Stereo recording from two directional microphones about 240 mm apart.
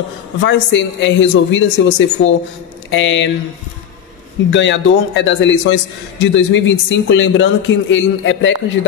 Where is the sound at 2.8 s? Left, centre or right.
Left.